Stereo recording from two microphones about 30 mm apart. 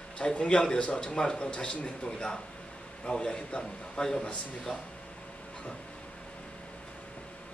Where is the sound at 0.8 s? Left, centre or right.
Left.